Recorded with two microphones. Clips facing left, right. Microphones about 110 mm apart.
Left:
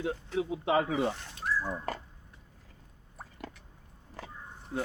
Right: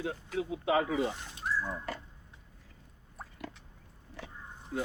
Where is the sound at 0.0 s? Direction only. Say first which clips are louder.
Left 3 dB; 25° left (ahead or behind).